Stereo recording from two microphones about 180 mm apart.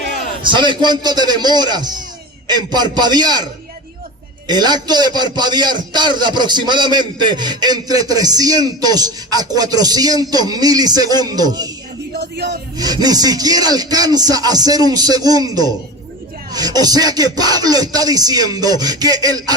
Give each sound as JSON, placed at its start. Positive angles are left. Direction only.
{"t": 0.4, "sound": "a man's voice", "side_deg": -25}
{"t": 12.2, "sound": "a sound", "side_deg": -70}
{"t": 12.7, "sound": "a man's voice", "side_deg": -20}